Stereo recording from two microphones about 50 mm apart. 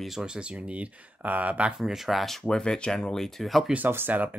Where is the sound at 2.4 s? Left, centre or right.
Centre.